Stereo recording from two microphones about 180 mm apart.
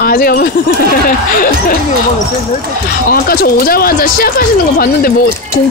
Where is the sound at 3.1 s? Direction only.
55° left (ahead or behind).